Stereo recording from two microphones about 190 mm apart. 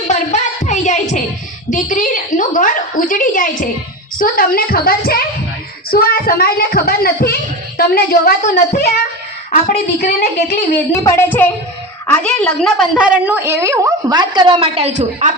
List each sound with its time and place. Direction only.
0.1 s a sound: 40° left (ahead or behind)
1.7 s a woman's voice: 40° left (ahead or behind)
11.0 s a woman's voice: 10° left (ahead or behind); by 15.4 s 40° right (ahead or behind)